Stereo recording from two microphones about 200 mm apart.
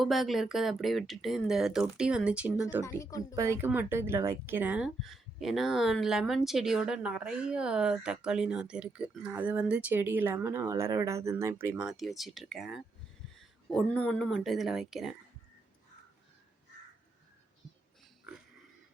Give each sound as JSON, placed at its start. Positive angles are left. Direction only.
{"t": 0.0, "sound": "speech", "side_deg": 0}
{"t": 2.8, "sound": "speech", "side_deg": 15}
{"t": 3.3, "sound": "speech", "side_deg": -15}